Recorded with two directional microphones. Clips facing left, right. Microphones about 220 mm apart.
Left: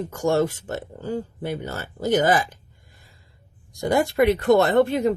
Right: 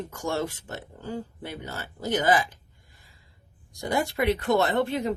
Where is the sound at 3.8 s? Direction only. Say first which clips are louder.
Left 7 dB; 50° left (ahead or behind).